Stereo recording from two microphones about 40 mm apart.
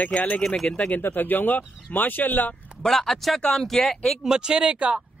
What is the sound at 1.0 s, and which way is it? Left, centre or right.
Speech, left.